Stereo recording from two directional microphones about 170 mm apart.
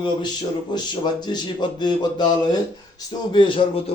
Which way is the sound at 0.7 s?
25° left (ahead or behind).